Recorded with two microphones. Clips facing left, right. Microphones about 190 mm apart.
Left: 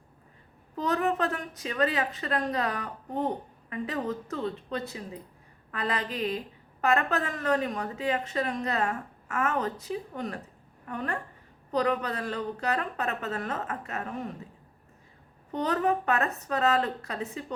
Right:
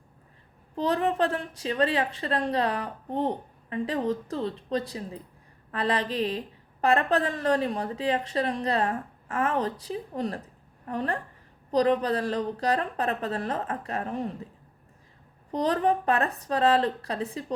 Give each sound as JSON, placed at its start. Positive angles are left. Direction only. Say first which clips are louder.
{"t": 0.8, "sound": "a woman's voice", "louder": "right 2 dB", "side_deg": -30}
{"t": 15.5, "sound": "a woman's voice", "louder": "right 2 dB", "side_deg": -35}